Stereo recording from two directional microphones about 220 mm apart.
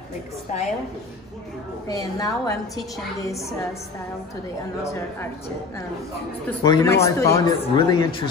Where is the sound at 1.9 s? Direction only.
15° left (ahead or behind).